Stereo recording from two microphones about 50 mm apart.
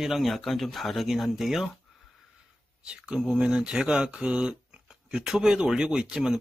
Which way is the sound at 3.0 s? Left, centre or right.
Centre.